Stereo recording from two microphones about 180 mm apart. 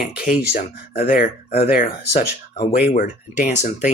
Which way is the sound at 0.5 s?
50° left (ahead or behind).